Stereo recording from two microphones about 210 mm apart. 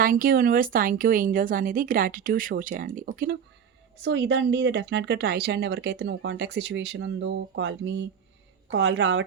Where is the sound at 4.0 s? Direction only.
55° right (ahead or behind).